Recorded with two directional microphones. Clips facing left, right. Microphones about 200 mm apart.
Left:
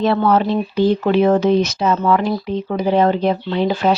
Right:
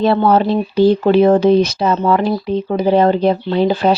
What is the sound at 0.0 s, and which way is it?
Speech, 30° right (ahead or behind).